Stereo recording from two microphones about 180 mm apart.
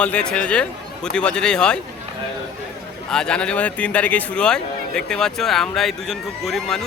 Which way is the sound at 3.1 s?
5° left (ahead or behind).